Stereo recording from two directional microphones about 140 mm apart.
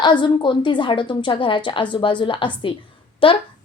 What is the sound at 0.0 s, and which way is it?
A woman's voice, 35° left (ahead or behind).